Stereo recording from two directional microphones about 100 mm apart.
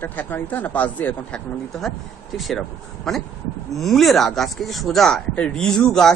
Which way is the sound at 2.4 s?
Centre (ahead or behind).